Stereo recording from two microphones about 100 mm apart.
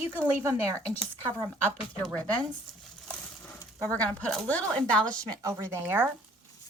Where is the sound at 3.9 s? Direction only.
15° left (ahead or behind).